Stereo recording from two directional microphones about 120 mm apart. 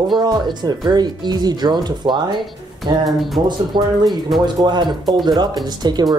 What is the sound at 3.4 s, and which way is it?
Speech, 40° right (ahead or behind).